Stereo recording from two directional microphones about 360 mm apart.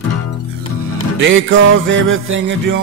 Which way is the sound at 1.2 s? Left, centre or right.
Right.